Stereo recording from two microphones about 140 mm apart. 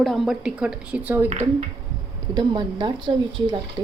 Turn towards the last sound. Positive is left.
turn(degrees=-35)  # may be behind; listen again after turning